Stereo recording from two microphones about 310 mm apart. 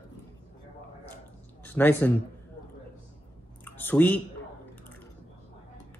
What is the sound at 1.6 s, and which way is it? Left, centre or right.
Speech, centre.